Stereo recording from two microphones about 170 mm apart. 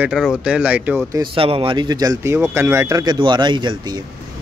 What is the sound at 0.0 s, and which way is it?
Speech, 5° right (ahead or behind).